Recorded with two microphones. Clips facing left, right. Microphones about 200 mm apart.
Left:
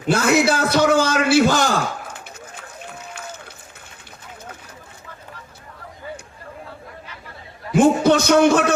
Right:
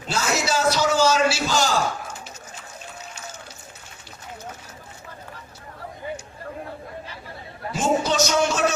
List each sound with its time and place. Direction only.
0.1 s a man's voice: 55° left (ahead or behind)
7.7 s a man's voice: 55° left (ahead or behind)